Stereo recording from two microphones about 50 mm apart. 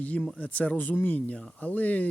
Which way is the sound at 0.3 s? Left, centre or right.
Left.